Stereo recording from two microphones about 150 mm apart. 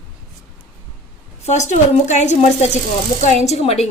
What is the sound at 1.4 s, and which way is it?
A woman's voice, 50° left (ahead or behind).